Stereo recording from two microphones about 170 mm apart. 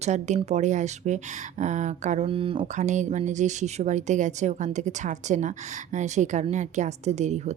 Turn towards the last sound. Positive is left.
turn(degrees=-40)  # may be behind; listen again after turning